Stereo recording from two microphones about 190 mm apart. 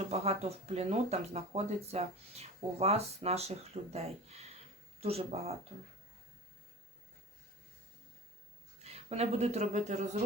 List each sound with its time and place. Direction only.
0.1 s speech: 35° right (ahead or behind)
8.8 s speech: 35° right (ahead or behind)